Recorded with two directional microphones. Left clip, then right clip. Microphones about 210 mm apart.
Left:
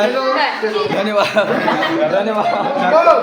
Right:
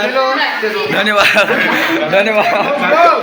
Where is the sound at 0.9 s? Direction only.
Centre (ahead or behind).